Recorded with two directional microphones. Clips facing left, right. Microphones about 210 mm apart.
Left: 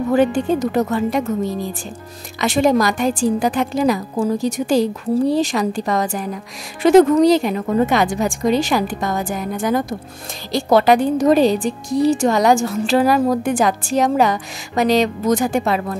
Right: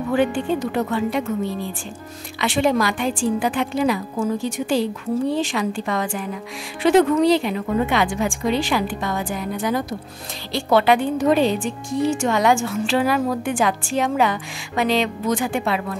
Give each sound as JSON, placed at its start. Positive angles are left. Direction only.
{"t": 0.1, "sound": "a woman's voice", "side_deg": 40}